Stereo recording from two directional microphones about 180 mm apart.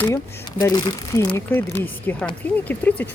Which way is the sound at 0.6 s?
20° left (ahead or behind).